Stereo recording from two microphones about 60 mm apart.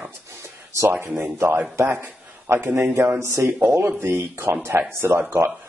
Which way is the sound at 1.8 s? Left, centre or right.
Right.